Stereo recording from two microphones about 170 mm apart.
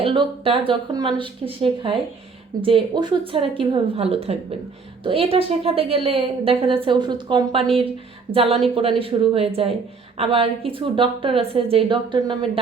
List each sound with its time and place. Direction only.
0.0 s a woman's voice: 30° right (ahead or behind)